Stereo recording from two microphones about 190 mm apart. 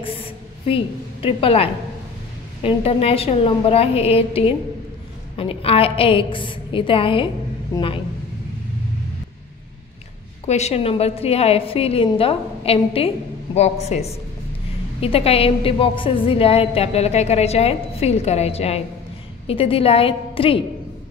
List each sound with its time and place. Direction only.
0.0 s a sound: 30° left (ahead or behind)
2.6 s a woman's voice: 30° left (ahead or behind)
10.4 s a woman's voice: 35° left (ahead or behind)